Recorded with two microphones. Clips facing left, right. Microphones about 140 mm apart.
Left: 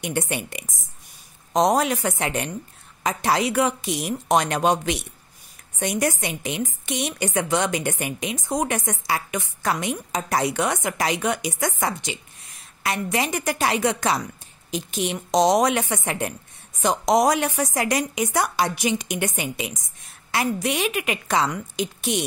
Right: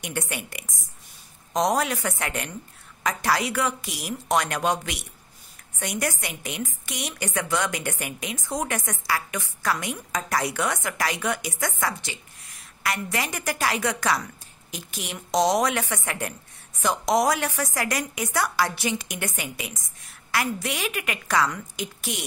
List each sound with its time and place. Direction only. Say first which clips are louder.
0.0 s a woman's voice: left 5 dB; 20° left (ahead or behind)